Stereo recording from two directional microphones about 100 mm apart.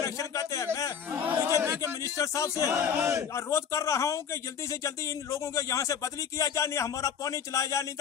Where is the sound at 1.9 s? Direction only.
30° left (ahead or behind).